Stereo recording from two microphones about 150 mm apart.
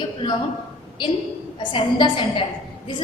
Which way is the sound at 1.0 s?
30° left (ahead or behind).